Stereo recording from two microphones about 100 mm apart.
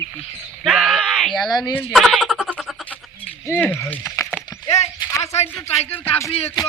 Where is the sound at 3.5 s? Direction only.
15° left (ahead or behind).